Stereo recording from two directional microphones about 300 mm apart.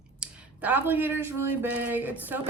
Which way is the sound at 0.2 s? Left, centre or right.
Centre.